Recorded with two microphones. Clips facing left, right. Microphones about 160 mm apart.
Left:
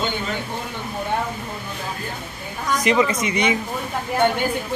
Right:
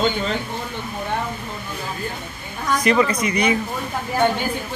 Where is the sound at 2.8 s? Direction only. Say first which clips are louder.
Right 1 dB; 15° left (ahead or behind).